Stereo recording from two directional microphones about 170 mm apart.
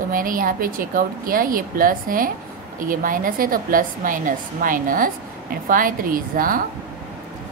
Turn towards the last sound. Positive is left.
turn(degrees=-55)  # may be behind; listen again after turning